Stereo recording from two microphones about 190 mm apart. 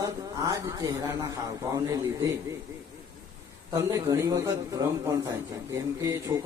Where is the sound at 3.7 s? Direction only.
15° right (ahead or behind).